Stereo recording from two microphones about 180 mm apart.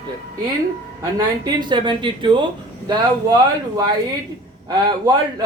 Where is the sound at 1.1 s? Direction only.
25° right (ahead or behind).